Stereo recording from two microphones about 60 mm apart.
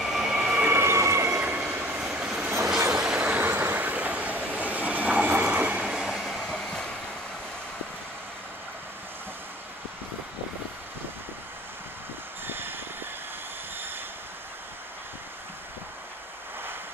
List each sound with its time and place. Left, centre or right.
0.0 s vehicle: centre
0.7 s emergency vehicle: right
1.4 s train: right
2.0 s train: centre
2.4 s train: right
3.0 s vehicle: centre
3.4 s train: right; by 6.0 s centre
6.0 s train: centre
12.4 s train: right